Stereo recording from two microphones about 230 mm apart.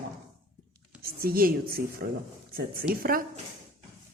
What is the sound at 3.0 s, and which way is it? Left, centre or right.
Speech, right.